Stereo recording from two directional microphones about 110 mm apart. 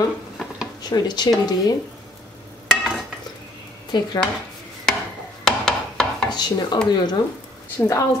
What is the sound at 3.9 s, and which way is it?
Speech, 40° left (ahead or behind).